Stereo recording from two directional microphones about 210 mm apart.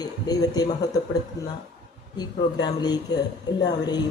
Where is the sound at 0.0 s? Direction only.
20° left (ahead or behind).